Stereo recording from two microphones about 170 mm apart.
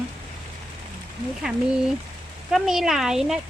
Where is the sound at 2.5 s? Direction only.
Centre (ahead or behind).